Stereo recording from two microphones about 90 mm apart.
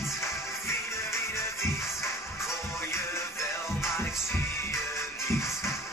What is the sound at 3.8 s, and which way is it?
Music, 30° left (ahead or behind).